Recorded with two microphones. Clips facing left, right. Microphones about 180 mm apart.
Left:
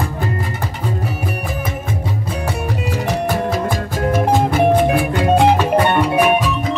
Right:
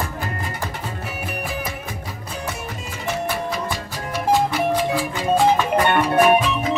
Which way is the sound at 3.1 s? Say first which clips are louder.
Left 4 dB; 45° left (ahead or behind).